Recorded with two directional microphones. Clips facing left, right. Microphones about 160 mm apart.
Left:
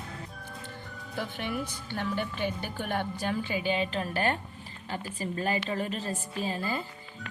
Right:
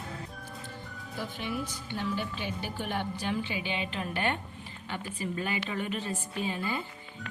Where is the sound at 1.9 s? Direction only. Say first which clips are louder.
Left 1 dB; 55° left (ahead or behind).